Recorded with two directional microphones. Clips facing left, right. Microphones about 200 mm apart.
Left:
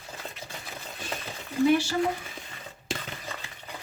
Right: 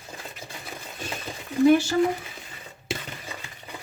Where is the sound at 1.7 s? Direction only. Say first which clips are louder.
Right 5 dB; 45° right (ahead or behind).